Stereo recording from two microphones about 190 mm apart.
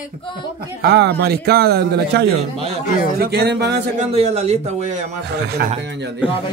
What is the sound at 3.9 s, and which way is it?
Speech, 35° right (ahead or behind).